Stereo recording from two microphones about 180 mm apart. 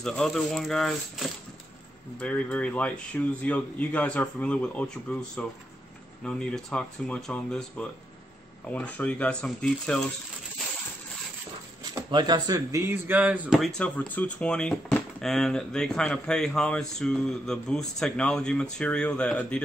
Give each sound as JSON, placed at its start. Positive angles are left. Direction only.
{"t": 0.0, "sound": "a man's voice", "side_deg": 0}
{"t": 12.1, "sound": "a man's voice", "side_deg": -25}